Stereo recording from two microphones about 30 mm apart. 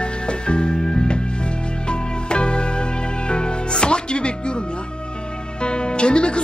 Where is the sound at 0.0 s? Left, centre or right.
Left.